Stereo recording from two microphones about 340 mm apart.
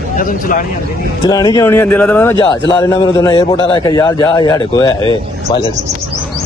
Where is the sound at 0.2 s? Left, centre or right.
Left.